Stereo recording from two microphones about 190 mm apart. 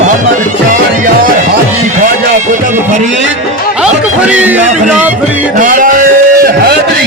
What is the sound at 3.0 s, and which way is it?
Music, 40° right (ahead or behind).